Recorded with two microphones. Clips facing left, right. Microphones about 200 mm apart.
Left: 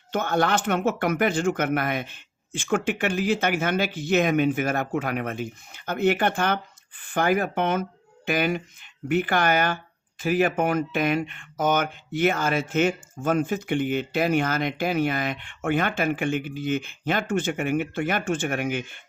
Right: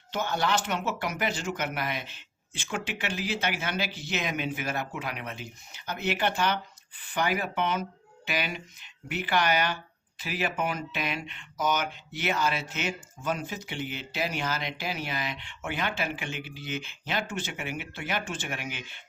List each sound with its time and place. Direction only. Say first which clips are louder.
0.1 s speech: left 5 dB; 55° left (ahead or behind)